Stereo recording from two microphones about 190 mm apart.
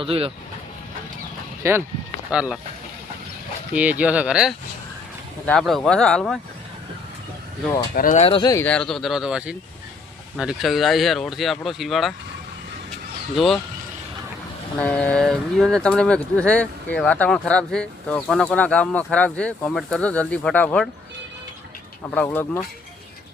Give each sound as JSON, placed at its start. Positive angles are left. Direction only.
{"t": 0.0, "sound": "speech", "side_deg": -30}
{"t": 1.6, "sound": "speech", "side_deg": -15}
{"t": 3.8, "sound": "speech", "side_deg": -5}
{"t": 7.9, "sound": "speech", "side_deg": 45}
{"t": 8.2, "sound": "speech", "side_deg": 25}
{"t": 8.5, "sound": "speech", "side_deg": 5}
{"t": 13.3, "sound": "speech", "side_deg": 0}
{"t": 14.8, "sound": "speech", "side_deg": 5}
{"t": 22.0, "sound": "speech", "side_deg": 10}